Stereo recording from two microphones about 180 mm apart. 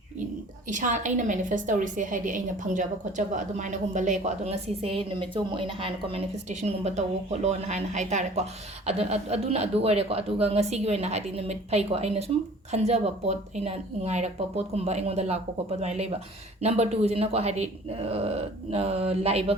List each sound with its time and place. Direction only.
0.7 s a woman's voice: 45° right (ahead or behind)